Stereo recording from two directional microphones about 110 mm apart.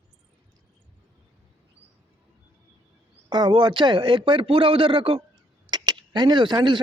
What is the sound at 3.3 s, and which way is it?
A man's voice, 40° right (ahead or behind).